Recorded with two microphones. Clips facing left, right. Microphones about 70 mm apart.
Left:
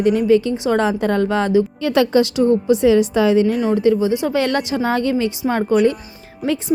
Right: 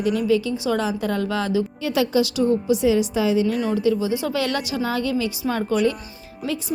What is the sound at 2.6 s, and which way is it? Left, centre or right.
A woman's voice, left.